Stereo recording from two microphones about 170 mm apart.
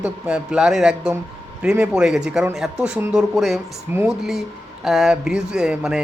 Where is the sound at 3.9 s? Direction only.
15° right (ahead or behind).